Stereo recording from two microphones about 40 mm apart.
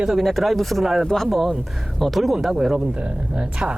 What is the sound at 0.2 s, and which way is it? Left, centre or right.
Speech, centre.